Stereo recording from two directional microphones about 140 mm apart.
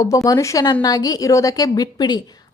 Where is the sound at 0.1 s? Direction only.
20° left (ahead or behind).